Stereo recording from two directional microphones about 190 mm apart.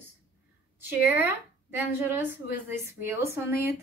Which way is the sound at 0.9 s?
10° right (ahead or behind).